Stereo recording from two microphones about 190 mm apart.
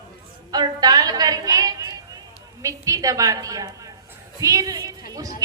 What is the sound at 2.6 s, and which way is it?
A woman's voice, 15° right (ahead or behind).